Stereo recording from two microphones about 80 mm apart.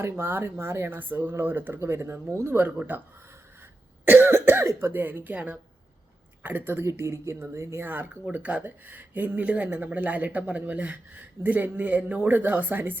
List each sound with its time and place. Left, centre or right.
0.0 s speech: right
2.6 s speech: right
4.0 s a woman's voice: right
7.9 s speech: right